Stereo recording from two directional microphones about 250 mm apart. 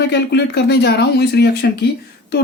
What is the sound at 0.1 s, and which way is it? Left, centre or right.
Speech, left.